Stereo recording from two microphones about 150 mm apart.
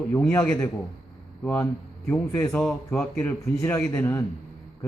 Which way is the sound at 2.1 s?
15° left (ahead or behind).